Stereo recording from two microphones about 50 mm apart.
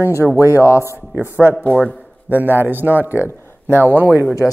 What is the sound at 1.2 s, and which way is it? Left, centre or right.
Speech, right.